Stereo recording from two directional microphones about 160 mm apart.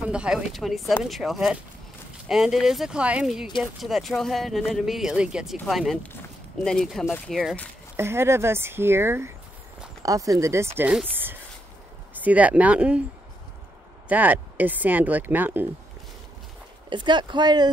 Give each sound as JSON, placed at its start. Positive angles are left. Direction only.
{"t": 0.0, "sound": "speech", "side_deg": -5}
{"t": 7.9, "sound": "speech", "side_deg": -15}
{"t": 12.1, "sound": "speech", "side_deg": -10}
{"t": 14.0, "sound": "speech", "side_deg": -10}
{"t": 16.9, "sound": "speech", "side_deg": -30}